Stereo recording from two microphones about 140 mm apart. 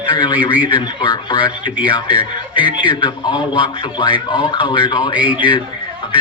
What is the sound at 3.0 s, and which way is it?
A man's voice, 35° left (ahead or behind).